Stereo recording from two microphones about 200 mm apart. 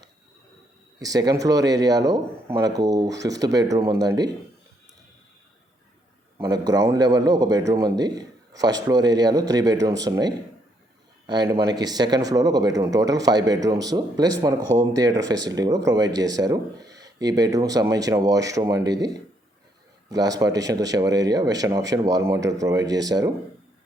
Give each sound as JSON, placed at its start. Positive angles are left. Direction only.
{"t": 0.9, "sound": "speech", "side_deg": -20}
{"t": 6.4, "sound": "speech", "side_deg": -20}